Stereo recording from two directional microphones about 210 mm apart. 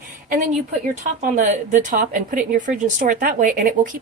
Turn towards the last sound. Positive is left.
turn(degrees=-40)  # may be behind; listen again after turning